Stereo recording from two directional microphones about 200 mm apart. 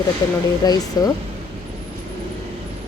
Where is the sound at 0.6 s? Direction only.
20° left (ahead or behind).